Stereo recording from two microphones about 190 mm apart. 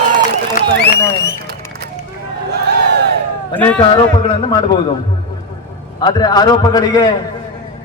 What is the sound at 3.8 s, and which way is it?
Speech, 30° left (ahead or behind).